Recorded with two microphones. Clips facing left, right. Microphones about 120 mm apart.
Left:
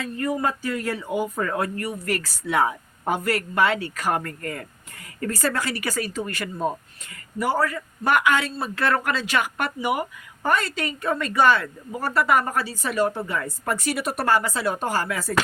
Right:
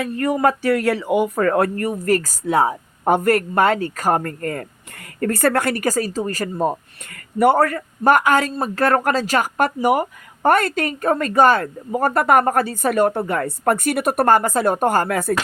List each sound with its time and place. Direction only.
0.0 s speech: 65° right (ahead or behind); by 3.1 s 35° right (ahead or behind)
3.1 s speech: 50° right (ahead or behind)
5.2 s speech: 55° right (ahead or behind)